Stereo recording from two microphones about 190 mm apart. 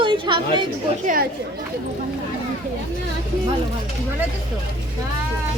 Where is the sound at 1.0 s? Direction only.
50° right (ahead or behind).